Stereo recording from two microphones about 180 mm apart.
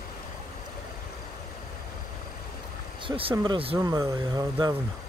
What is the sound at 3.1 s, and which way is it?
Speech, 30° right (ahead or behind).